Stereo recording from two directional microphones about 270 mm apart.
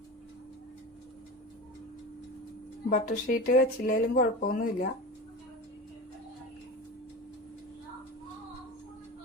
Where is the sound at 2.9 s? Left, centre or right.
Left.